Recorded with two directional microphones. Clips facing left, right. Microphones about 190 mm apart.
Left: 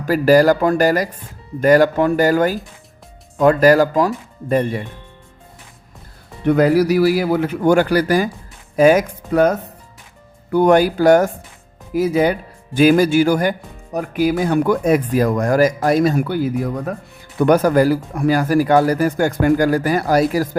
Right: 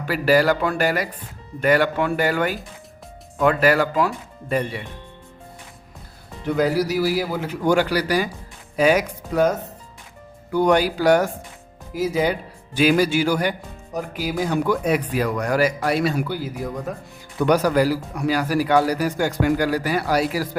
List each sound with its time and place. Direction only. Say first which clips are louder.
0.0 s speech: left 6 dB; 40° left (ahead or behind)
6.4 s speech: left 7 dB; 60° left (ahead or behind)
10.5 s speech: left 5 dB; 50° left (ahead or behind)